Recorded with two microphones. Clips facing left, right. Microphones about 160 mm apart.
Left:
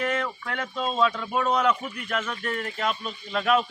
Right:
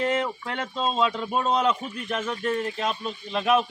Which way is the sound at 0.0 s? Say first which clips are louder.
Right 3 dB; 25° right (ahead or behind).